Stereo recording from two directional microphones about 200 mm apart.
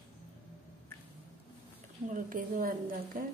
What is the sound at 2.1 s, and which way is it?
A woman's voice, 40° right (ahead or behind).